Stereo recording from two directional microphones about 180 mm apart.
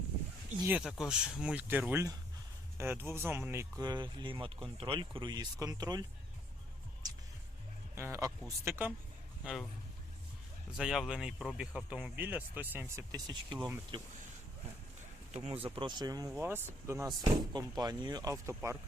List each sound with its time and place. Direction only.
0.6 s speech: 5° right (ahead or behind); by 6.1 s 20° right (ahead or behind)
7.9 s speech: 15° right (ahead or behind)
9.4 s a man's voice: 5° right (ahead or behind)
10.8 s speech: centre (ahead or behind)
13.1 s speech: 20° right (ahead or behind)
15.4 s speech: 30° right (ahead or behind); by 18.8 s 15° right (ahead or behind)